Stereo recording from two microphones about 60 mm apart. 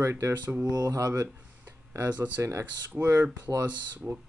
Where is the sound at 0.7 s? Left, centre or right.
Right.